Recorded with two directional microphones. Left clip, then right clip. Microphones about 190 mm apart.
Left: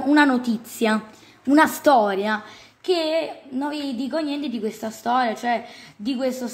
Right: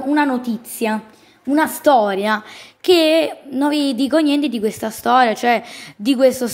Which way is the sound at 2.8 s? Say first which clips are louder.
Right 8 dB; 40° right (ahead or behind).